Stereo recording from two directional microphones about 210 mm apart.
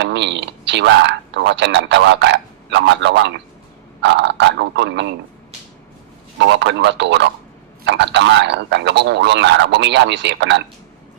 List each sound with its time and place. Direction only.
0.0 s a man's voice: 55° right (ahead or behind)
6.4 s a man's voice: 55° right (ahead or behind)